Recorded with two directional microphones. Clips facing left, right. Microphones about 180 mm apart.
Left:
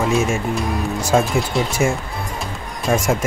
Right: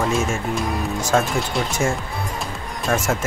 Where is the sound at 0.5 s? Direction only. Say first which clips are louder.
Left 2 dB; 5° left (ahead or behind).